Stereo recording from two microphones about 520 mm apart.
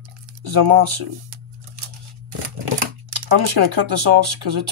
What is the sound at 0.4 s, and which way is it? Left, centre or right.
Speech, right.